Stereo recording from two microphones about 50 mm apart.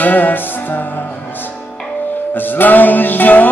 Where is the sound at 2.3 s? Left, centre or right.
Left.